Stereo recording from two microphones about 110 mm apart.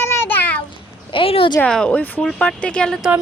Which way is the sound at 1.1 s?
55° left (ahead or behind).